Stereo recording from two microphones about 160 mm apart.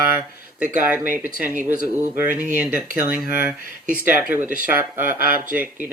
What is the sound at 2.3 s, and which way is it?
Speech, 60° right (ahead or behind).